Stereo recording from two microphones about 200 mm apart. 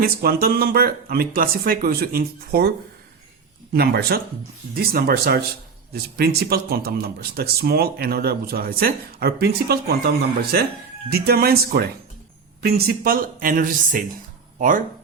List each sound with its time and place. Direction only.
0.0 s speech: 50° right (ahead or behind)
11.1 s speech: 50° right (ahead or behind)